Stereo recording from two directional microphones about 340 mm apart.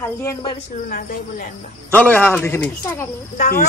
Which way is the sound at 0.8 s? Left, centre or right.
Left.